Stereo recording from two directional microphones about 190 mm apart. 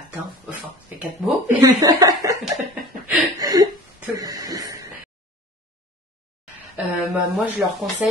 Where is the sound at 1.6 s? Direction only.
20° right (ahead or behind).